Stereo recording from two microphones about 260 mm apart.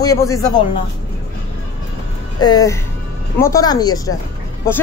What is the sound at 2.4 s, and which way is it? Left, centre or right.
A woman's voice, centre.